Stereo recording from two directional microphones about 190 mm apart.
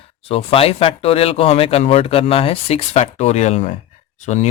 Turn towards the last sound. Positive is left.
turn(degrees=40)  # may be behind; listen again after turning